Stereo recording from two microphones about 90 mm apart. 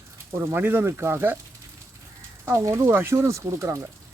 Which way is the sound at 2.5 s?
30° right (ahead or behind).